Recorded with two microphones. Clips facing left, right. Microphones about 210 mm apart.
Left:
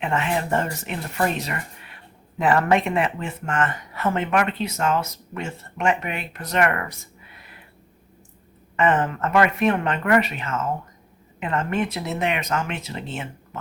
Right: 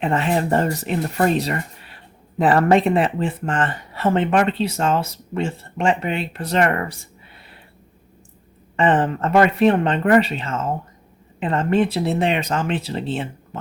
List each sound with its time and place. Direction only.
0.0 s speech: 35° right (ahead or behind)
8.7 s speech: 30° right (ahead or behind)